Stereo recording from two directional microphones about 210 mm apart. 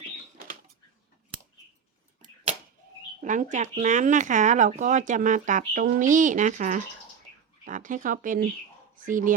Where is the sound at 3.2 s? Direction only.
35° right (ahead or behind).